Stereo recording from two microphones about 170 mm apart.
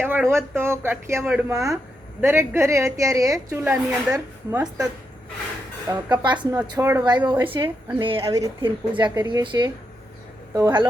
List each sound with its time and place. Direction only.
0.0 s a woman's voice: 10° right (ahead or behind)
5.9 s speech: 25° right (ahead or behind)
6.6 s a woman's voice: 15° right (ahead or behind); by 8.2 s 30° right (ahead or behind)
8.2 s speech: 20° right (ahead or behind)